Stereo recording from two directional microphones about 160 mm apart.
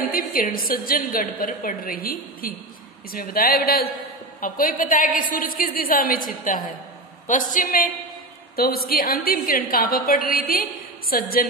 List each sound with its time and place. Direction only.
0.3 s a woman's voice: 60° left (ahead or behind)
4.4 s a woman's voice: 60° left (ahead or behind)
8.5 s a woman's voice: 70° left (ahead or behind)